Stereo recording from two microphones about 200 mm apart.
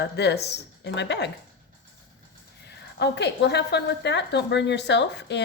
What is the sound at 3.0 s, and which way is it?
A woman's voice, 60° left (ahead or behind).